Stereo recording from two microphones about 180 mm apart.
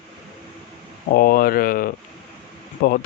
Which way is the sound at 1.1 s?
55° left (ahead or behind).